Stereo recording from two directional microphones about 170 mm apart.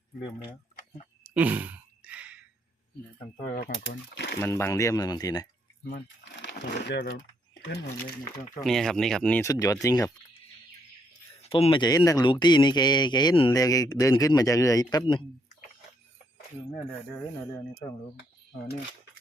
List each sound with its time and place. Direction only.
1.3 s sigh: 10° right (ahead or behind)
3.5 s speech: 70° left (ahead or behind)
4.4 s speech: 15° left (ahead or behind)
6.8 s speech: 75° left (ahead or behind)
8.6 s speech: centre (ahead or behind)
9.4 s speech: 20° left (ahead or behind)
11.4 s speech: 30° left (ahead or behind)
17.1 s speech: 5° left (ahead or behind)